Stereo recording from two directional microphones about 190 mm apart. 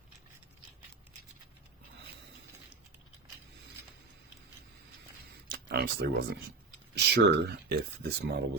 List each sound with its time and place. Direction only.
5.5 s speech: 55° right (ahead or behind)